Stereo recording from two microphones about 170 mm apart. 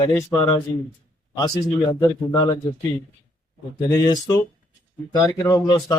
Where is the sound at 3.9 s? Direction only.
20° left (ahead or behind).